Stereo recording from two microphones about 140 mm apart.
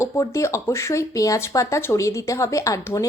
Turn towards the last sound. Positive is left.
turn(degrees=20)  # may be behind; listen again after turning